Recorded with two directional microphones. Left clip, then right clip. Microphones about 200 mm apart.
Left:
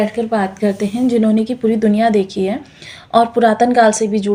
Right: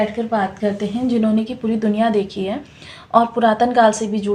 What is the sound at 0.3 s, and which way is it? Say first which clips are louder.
A woman's voice: left 2 dB; 40° left (ahead or behind).